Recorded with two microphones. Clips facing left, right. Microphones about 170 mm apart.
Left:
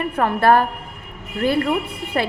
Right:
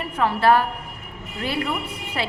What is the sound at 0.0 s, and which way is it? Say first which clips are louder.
A woman's voice: left 2 dB; 50° left (ahead or behind).